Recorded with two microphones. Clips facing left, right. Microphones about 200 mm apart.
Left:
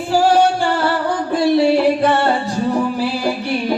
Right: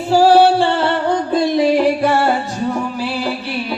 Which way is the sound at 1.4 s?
15° right (ahead or behind).